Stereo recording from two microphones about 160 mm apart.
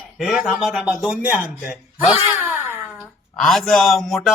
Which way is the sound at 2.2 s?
15° right (ahead or behind).